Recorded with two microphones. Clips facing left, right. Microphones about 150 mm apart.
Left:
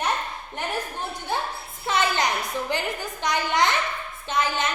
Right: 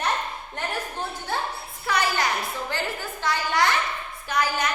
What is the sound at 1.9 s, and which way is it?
A child's voice, 20° left (ahead or behind).